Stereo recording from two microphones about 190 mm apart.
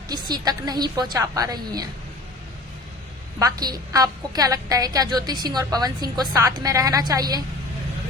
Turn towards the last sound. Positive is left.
turn(degrees=-20)  # may be behind; listen again after turning